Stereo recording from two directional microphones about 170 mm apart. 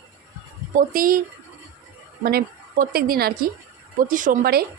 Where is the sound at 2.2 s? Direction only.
65° right (ahead or behind).